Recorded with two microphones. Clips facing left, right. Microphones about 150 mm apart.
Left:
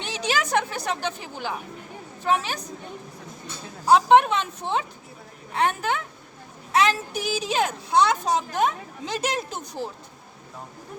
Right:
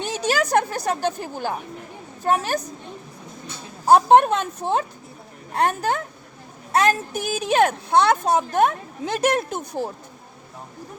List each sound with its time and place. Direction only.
0.0 s a woman's voice: 45° right (ahead or behind)
3.8 s a woman's voice: 50° right (ahead or behind)